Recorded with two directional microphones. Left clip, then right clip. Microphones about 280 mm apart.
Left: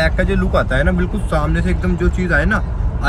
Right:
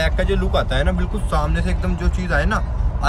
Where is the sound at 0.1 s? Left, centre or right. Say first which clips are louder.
Left 3 dB; right.